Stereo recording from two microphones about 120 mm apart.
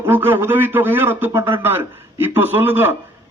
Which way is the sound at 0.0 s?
20° right (ahead or behind).